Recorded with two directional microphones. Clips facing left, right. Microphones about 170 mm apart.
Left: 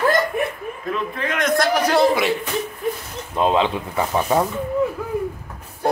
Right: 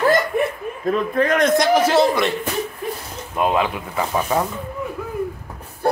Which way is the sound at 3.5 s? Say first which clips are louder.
Left 2 dB; 25° left (ahead or behind).